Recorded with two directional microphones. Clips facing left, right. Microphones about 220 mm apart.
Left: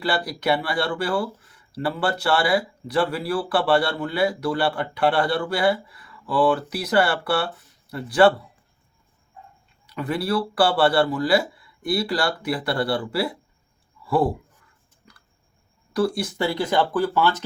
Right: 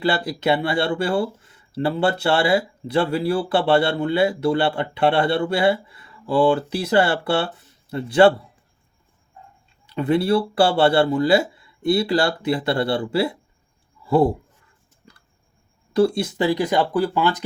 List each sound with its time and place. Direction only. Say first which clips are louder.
0.0 s speech: right 3 dB; 25° right (ahead or behind)
9.8 s speech: right 6 dB; 25° right (ahead or behind)
15.9 s speech: right 5 dB; 25° right (ahead or behind)